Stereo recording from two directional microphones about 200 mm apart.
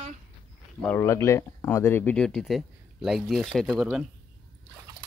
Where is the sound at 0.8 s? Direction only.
10° left (ahead or behind).